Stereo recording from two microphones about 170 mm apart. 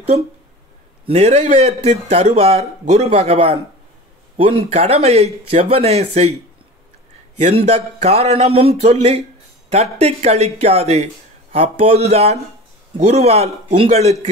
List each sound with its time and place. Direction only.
1.0 s a man's voice: 35° right (ahead or behind)
7.3 s a man's voice: 40° right (ahead or behind)